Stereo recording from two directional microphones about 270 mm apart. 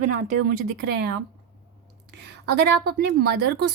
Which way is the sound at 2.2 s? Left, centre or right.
Right.